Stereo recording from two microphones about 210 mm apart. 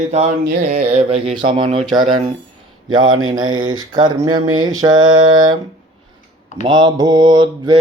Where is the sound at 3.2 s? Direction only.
20° right (ahead or behind).